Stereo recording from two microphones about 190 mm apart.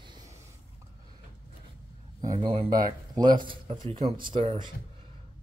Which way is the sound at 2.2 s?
25° right (ahead or behind).